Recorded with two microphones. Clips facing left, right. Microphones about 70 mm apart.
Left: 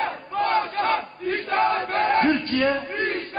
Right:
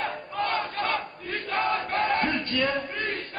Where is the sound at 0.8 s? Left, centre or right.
Left.